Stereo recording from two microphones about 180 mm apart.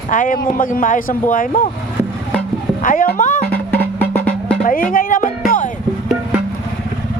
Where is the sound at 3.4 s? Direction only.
10° left (ahead or behind).